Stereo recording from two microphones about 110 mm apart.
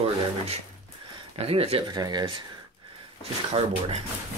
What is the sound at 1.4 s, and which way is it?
Speech, 65° right (ahead or behind).